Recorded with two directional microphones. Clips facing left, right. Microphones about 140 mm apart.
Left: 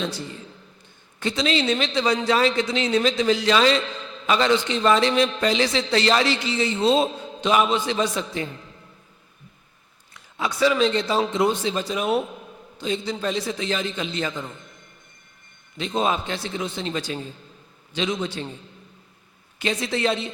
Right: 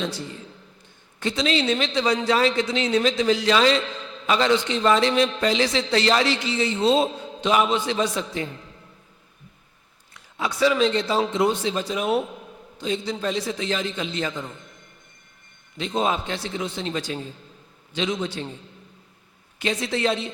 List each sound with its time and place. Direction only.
0.0 s a man's voice: 15° right (ahead or behind)
10.6 s a man's voice: 20° right (ahead or behind)
12.0 s a man's voice: 70° right (ahead or behind)
12.8 s a man's voice: 20° right (ahead or behind)
16.0 s a man's voice: 20° right (ahead or behind)
19.8 s a man's voice: 20° right (ahead or behind)